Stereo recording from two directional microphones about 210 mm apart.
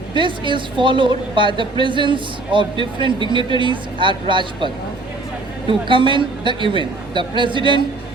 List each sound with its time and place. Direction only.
0.1 s a man's voice: 25° right (ahead or behind)